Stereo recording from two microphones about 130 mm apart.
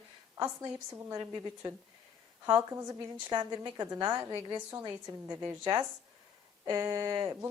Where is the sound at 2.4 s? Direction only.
20° right (ahead or behind).